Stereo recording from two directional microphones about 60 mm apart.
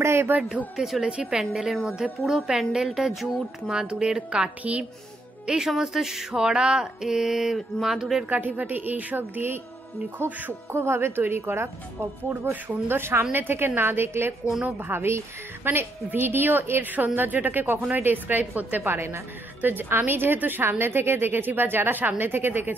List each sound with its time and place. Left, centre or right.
0.0 s a sound: right
0.7 s speech: centre
1.0 s speech: centre
5.5 s speech: centre
8.3 s a woman's voice: right
10.7 s a woman's voice: right
12.3 s a woman's voice: right
19.6 s a woman's voice: right